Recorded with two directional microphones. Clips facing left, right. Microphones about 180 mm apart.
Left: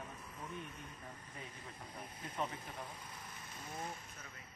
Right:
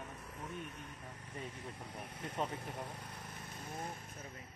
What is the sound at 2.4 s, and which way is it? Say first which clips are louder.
Speech: right 1 dB; 45° right (ahead or behind).